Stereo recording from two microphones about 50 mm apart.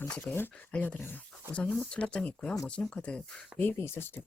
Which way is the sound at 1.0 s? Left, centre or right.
Left.